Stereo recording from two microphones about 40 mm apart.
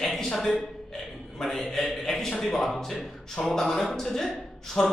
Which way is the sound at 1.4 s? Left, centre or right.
Centre.